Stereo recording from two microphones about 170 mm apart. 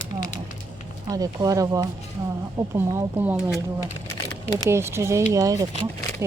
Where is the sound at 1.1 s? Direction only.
20° right (ahead or behind).